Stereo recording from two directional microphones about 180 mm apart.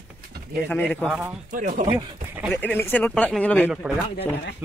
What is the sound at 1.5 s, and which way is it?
Speech, 50° right (ahead or behind).